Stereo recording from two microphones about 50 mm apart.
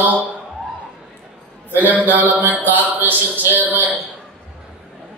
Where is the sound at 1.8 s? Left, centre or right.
Right.